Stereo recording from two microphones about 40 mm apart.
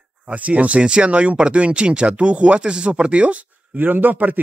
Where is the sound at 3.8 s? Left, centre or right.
Right.